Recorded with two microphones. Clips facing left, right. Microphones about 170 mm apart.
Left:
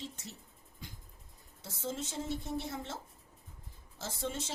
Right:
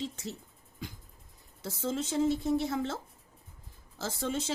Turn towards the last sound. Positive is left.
turn(degrees=-90)